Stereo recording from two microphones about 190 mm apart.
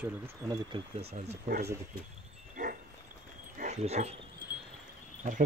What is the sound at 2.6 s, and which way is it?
Dog, 40° right (ahead or behind).